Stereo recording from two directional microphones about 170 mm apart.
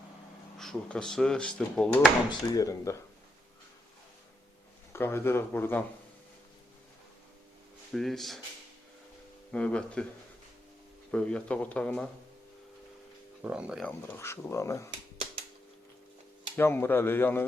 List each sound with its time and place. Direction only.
0.6 s speech: 5° left (ahead or behind)
2.3 s speech: 20° left (ahead or behind)
4.9 s speech: 15° left (ahead or behind)
7.9 s speech: centre (ahead or behind)
9.5 s speech: 5° left (ahead or behind)
11.1 s speech: 5° left (ahead or behind)
13.4 s speech: 5° right (ahead or behind)
13.8 s speech: 10° left (ahead or behind)
16.6 s speech: 15° left (ahead or behind)